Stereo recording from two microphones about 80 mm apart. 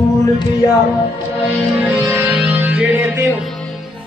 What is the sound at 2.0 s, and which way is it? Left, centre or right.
Music, right.